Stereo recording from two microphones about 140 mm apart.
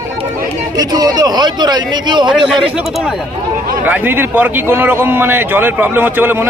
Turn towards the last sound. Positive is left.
turn(degrees=-15)  # may be behind; listen again after turning